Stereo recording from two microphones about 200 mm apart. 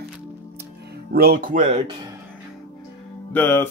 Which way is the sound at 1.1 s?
50° right (ahead or behind).